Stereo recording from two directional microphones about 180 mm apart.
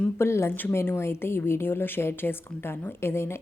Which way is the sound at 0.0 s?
15° left (ahead or behind).